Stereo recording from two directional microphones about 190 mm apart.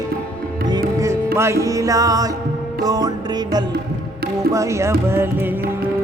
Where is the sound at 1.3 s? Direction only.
15° right (ahead or behind).